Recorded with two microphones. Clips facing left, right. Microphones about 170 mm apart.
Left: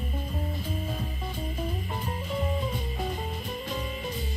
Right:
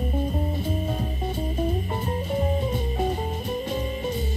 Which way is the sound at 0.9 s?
50° right (ahead or behind).